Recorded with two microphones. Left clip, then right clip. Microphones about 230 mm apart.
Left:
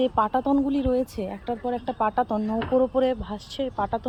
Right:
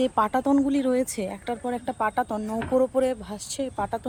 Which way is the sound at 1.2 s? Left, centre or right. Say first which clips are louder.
Left 1 dB; right.